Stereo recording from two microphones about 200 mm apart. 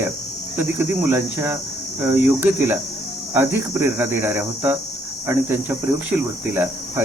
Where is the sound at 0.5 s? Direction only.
10° right (ahead or behind).